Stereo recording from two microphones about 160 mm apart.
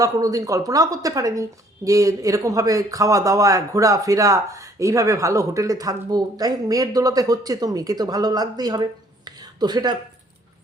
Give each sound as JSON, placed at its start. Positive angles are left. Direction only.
{"t": 0.0, "sound": "speech", "side_deg": -20}